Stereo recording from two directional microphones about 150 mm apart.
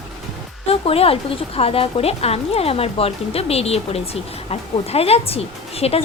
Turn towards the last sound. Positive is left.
turn(degrees=40)  # may be behind; listen again after turning